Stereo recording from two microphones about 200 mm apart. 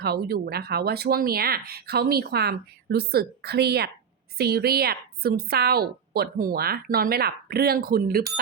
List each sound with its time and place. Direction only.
0.0 s a woman's voice: 50° right (ahead or behind)